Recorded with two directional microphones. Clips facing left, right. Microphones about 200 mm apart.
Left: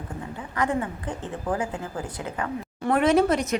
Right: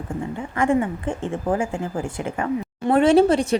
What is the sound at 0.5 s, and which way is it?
Speech, 25° right (ahead or behind).